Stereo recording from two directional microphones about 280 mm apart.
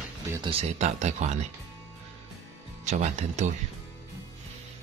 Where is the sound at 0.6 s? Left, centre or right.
Right.